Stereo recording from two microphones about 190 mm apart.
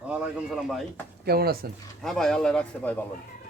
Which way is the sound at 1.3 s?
55° right (ahead or behind).